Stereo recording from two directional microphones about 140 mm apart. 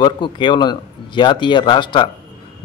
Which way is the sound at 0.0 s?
35° left (ahead or behind).